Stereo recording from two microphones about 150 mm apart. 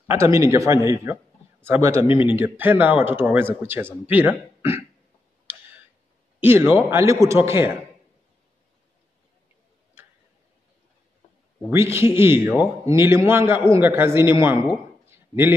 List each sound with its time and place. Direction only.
0.1 s a man's voice: 20° right (ahead or behind)
5.5 s tick: 15° right (ahead or behind)
6.4 s speech: 15° right (ahead or behind)
11.7 s speech: 15° right (ahead or behind)
15.0 s a sound: 15° right (ahead or behind)